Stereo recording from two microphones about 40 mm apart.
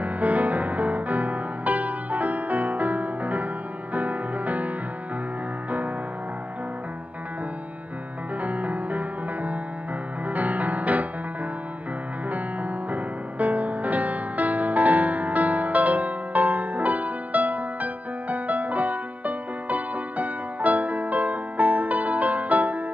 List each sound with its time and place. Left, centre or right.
0.0 s music: right
8.4 s music: right
12.3 s music: right